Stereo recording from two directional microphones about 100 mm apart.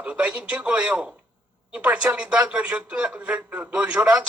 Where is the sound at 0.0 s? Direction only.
15° right (ahead or behind).